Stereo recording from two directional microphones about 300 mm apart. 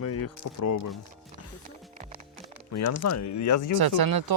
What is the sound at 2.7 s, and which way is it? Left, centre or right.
Speech, left.